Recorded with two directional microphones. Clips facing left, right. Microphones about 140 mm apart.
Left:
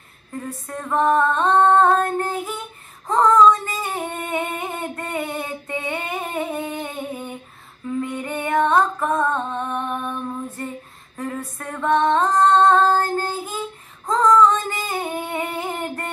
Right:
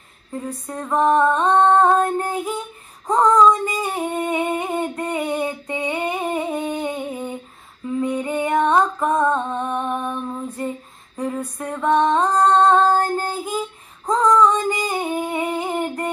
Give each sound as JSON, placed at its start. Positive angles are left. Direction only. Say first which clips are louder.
{"t": 0.7, "sound": "female singing", "louder": "right 1 dB", "side_deg": -15}
{"t": 7.8, "sound": "music", "louder": "right 3 dB", "side_deg": -15}
{"t": 11.1, "sound": "music", "louder": "right 4 dB", "side_deg": -15}
{"t": 14.0, "sound": "singing", "louder": "even", "side_deg": -15}